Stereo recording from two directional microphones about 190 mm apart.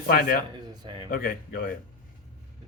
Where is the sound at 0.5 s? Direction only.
20° right (ahead or behind).